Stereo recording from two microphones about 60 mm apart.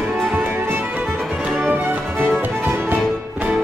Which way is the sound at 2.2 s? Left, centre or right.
Right.